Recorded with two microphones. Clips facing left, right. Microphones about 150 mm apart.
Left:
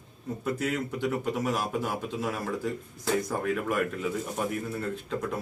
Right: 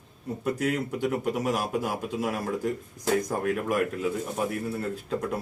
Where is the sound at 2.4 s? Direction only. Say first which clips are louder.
Right 3 dB; 45° right (ahead or behind).